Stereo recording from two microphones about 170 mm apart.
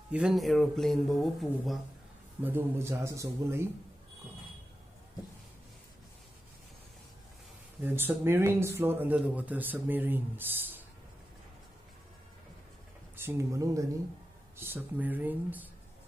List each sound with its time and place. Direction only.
0.1 s speech: 5° right (ahead or behind)
2.4 s speech: 15° right (ahead or behind)
7.8 s speech: 10° right (ahead or behind)
13.1 s speech: 15° right (ahead or behind)